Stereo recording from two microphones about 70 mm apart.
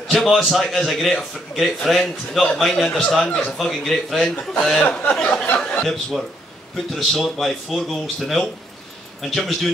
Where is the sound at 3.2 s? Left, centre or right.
Centre.